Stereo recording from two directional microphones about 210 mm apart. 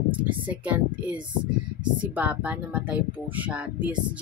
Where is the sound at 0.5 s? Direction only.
5° right (ahead or behind).